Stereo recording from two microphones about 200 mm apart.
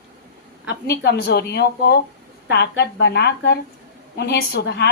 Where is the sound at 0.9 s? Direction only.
55° left (ahead or behind).